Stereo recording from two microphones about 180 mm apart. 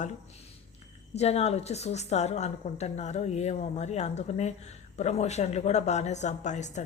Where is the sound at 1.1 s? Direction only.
35° left (ahead or behind).